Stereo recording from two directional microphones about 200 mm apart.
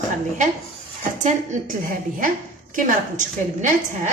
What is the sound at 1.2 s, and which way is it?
Speech, 35° right (ahead or behind).